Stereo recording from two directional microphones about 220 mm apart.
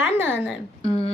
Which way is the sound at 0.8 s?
30° left (ahead or behind).